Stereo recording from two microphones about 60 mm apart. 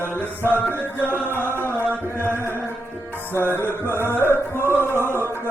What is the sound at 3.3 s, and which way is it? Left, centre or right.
Music, left.